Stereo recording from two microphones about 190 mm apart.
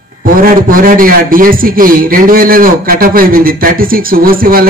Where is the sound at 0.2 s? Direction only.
45° right (ahead or behind).